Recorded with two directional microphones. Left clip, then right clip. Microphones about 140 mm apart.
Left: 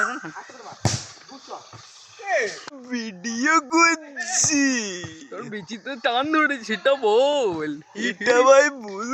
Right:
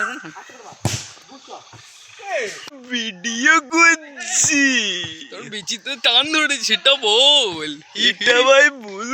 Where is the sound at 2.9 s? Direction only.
5° left (ahead or behind).